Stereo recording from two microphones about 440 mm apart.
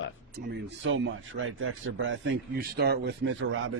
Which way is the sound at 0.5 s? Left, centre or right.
Right.